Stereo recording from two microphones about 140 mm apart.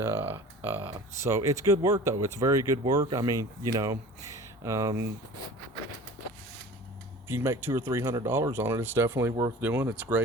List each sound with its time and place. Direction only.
0.0 s a sound: 15° right (ahead or behind)
0.9 s speech: 25° right (ahead or behind)
7.3 s speech: 15° right (ahead or behind)